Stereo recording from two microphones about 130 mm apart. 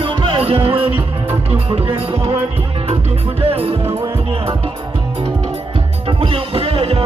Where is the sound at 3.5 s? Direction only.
50° right (ahead or behind).